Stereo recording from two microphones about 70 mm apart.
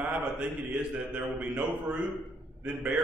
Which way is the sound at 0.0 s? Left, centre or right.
Centre.